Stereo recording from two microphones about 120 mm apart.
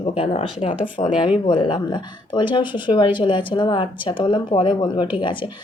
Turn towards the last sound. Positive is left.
turn(degrees=45)  # may be behind; listen again after turning